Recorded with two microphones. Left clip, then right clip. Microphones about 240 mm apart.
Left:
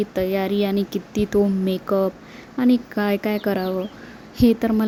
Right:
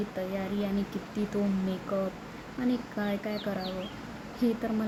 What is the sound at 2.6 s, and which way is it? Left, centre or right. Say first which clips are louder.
Speech: left 12 dB; left.